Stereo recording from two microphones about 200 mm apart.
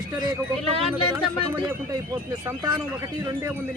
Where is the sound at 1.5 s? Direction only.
20° right (ahead or behind).